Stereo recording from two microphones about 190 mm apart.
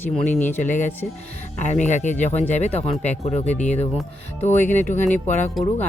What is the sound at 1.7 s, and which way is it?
Speech, 40° left (ahead or behind).